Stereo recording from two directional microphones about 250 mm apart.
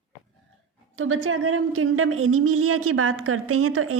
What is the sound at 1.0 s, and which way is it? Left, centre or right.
Speech, right.